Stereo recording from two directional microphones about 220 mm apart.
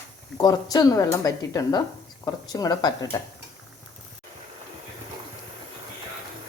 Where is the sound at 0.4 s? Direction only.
15° left (ahead or behind).